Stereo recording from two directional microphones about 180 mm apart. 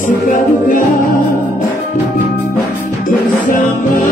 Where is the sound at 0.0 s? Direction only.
45° left (ahead or behind).